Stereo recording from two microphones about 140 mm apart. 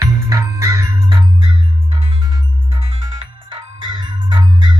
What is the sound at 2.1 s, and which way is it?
Music, 30° right (ahead or behind).